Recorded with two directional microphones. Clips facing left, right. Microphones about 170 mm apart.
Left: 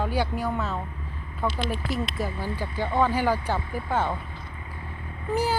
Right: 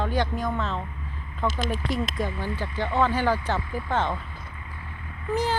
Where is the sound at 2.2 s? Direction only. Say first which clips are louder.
Right 1 dB; 10° left (ahead or behind).